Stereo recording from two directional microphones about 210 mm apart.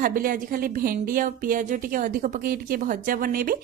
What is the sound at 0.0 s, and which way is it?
A woman's voice, 40° right (ahead or behind).